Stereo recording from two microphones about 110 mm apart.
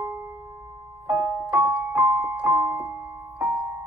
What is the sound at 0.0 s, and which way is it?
Music, 25° right (ahead or behind).